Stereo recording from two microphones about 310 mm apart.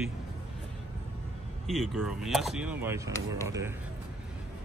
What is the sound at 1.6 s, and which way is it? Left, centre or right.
Speech, centre.